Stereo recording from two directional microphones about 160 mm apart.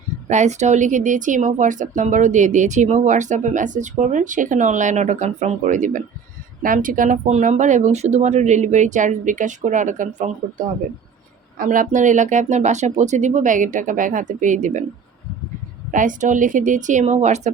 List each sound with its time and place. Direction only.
0.3 s a woman's voice: 45° right (ahead or behind)
15.9 s a woman's voice: 55° right (ahead or behind)